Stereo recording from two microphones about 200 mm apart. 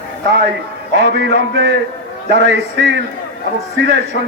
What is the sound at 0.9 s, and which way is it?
Speech, 60° right (ahead or behind).